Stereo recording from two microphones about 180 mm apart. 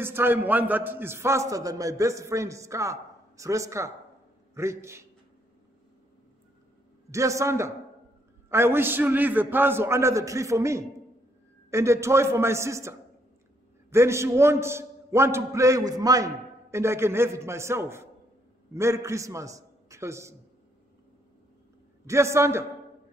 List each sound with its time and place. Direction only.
0.0 s a man's voice: 10° right (ahead or behind)
7.1 s a man's voice: 15° right (ahead or behind)
22.0 s a man's voice: 15° right (ahead or behind)